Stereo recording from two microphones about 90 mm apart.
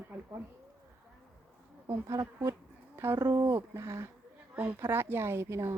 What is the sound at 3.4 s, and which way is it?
A woman's voice, 35° right (ahead or behind).